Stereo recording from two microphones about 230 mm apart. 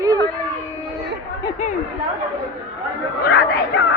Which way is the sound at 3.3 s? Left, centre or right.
Left.